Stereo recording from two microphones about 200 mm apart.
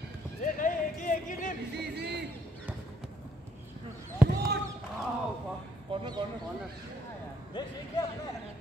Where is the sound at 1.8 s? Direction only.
55° right (ahead or behind).